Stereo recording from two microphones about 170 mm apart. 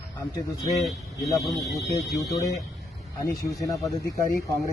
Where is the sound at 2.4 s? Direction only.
20° left (ahead or behind).